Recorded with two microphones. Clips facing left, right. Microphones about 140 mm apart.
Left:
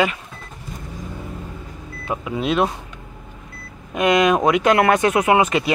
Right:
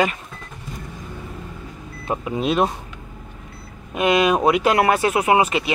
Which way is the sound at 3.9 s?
30° right (ahead or behind).